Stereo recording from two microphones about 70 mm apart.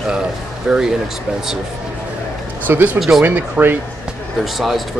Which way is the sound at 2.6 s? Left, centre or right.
Right.